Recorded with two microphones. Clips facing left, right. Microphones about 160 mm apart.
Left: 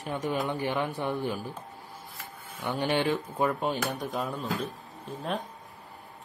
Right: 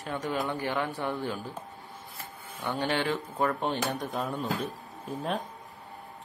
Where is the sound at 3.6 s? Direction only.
Centre (ahead or behind).